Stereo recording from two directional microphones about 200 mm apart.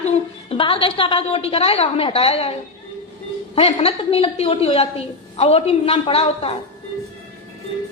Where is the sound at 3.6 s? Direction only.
30° left (ahead or behind).